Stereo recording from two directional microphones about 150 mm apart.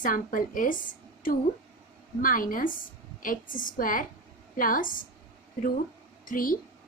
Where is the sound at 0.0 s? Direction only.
65° left (ahead or behind).